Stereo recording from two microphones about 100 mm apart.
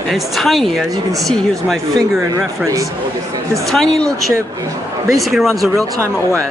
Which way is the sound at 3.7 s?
5° left (ahead or behind).